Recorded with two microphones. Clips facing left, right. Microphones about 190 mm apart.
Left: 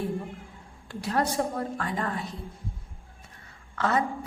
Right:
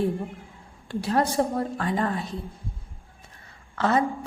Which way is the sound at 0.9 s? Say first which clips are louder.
Right 3 dB; 30° right (ahead or behind).